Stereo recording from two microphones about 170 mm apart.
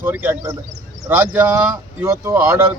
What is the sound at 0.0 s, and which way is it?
Speech, 10° right (ahead or behind).